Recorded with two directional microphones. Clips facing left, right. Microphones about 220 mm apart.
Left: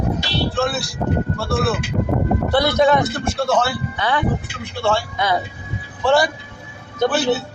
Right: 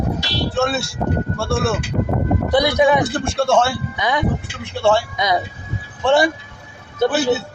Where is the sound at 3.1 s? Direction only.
30° right (ahead or behind).